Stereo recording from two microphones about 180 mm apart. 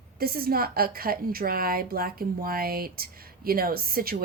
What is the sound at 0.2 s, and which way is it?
A woman's voice, 55° right (ahead or behind).